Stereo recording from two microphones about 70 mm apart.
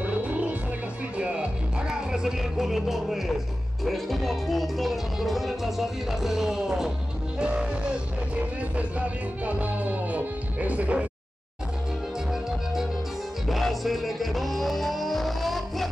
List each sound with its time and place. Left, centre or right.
0.0 s music: right; by 3.3 s centre
3.8 s speech: centre
7.3 s music: centre
12.3 s music: centre